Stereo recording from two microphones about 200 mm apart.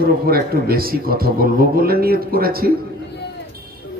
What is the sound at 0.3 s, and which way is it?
A man's voice, 50° right (ahead or behind).